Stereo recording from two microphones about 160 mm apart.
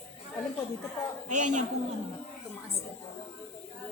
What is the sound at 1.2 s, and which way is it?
Speech, 50° right (ahead or behind).